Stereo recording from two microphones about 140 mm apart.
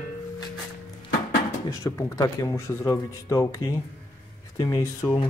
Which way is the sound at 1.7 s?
20° left (ahead or behind).